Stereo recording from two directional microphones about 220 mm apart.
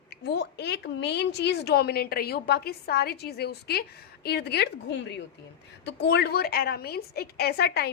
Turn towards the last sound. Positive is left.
turn(degrees=45)  # may be behind; listen again after turning